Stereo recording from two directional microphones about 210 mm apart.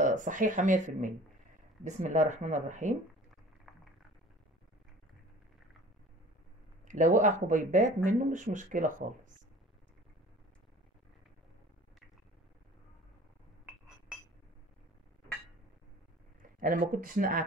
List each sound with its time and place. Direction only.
0.0 s speech: 35° right (ahead or behind)
3.7 s boiling: centre (ahead or behind)
6.9 s speech: 35° right (ahead or behind)
16.5 s a sound: 40° right (ahead or behind)
16.9 s speech: 40° right (ahead or behind)